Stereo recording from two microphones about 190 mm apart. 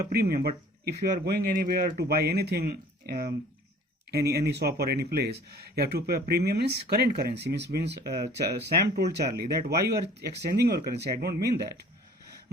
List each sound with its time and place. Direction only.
0.0 s speech: 55° right (ahead or behind)